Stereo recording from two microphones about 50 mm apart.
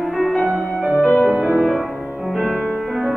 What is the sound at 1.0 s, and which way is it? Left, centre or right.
Music, left.